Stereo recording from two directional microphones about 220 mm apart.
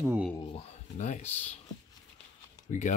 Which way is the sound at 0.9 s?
30° left (ahead or behind).